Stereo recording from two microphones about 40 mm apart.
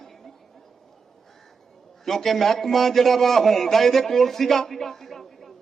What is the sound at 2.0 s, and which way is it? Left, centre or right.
A man's voice, centre.